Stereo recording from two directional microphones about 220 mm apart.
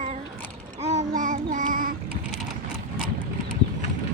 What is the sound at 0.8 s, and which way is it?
Child singing, 30° right (ahead or behind).